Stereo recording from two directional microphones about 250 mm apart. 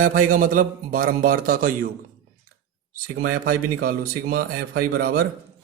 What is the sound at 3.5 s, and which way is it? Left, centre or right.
A man's voice, right.